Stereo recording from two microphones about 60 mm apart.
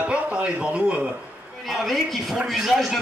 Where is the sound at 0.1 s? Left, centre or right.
Centre.